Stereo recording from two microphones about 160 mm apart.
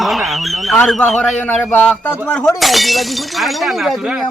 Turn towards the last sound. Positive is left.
turn(degrees=-5)  # may be behind; listen again after turning